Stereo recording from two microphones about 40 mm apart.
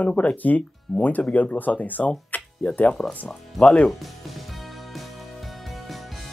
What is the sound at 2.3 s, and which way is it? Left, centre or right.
Music, left.